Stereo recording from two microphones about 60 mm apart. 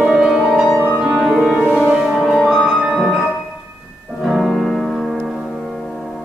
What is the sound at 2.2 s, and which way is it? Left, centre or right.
Music, centre.